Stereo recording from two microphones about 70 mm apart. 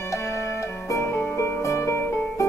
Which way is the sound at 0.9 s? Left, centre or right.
Left.